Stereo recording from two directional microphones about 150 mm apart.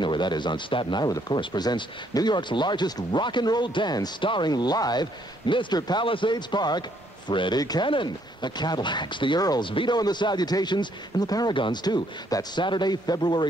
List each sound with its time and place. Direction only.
0.0 s speech: 30° left (ahead or behind)